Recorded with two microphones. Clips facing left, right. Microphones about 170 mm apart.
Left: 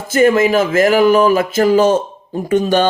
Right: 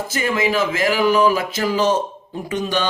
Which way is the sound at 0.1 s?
50° left (ahead or behind).